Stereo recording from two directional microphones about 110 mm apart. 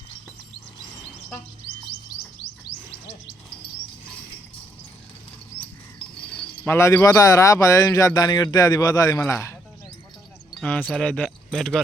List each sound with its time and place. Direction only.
6.7 s a man's voice: 25° left (ahead or behind)
9.2 s speech: 25° left (ahead or behind)
10.6 s speech: 15° left (ahead or behind)